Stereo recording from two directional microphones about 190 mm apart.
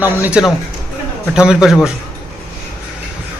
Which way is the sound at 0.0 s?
5° right (ahead or behind).